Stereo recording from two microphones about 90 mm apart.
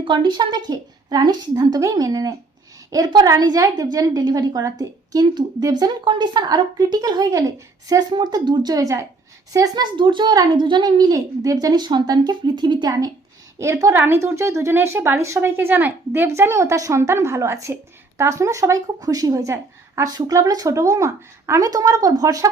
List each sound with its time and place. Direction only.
0.0 s speech: 60° right (ahead or behind); by 5.2 s 45° right (ahead or behind)
5.2 s speech: 55° right (ahead or behind)
13.6 s speech: 35° right (ahead or behind)
13.9 s speech: 25° right (ahead or behind); by 22.4 s 45° right (ahead or behind)